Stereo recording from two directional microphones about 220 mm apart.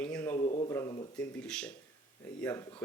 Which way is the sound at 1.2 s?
5° left (ahead or behind).